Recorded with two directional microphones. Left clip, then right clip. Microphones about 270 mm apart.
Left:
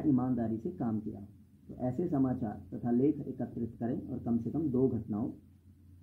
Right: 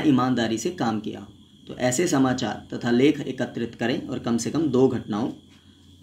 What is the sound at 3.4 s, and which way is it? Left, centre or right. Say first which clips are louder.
Speech: right 11 dB; centre.